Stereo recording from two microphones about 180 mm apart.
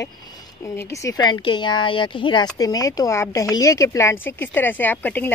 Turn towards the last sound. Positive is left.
turn(degrees=10)  # may be behind; listen again after turning